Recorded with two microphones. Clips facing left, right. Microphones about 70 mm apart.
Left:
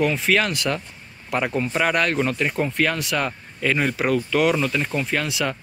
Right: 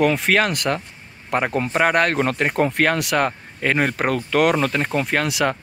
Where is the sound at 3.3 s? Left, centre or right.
Right.